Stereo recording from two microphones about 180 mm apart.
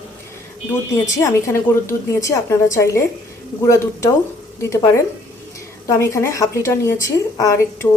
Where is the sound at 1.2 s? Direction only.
15° left (ahead or behind).